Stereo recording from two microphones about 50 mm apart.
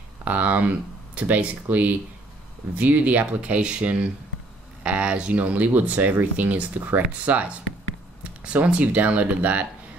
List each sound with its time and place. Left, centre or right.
0.2 s speech: right